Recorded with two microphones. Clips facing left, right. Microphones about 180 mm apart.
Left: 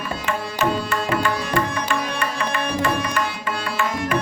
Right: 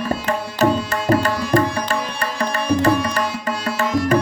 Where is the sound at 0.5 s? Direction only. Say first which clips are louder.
Right 4 dB; 40° right (ahead or behind).